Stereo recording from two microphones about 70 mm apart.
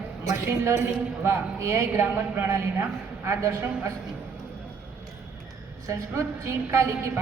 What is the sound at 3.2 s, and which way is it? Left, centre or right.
Speech, right.